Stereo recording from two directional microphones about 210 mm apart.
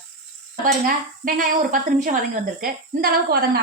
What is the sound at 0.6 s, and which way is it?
A woman's voice, 40° right (ahead or behind).